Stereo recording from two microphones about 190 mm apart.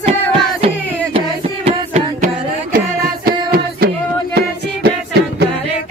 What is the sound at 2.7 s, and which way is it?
Music, 50° right (ahead or behind).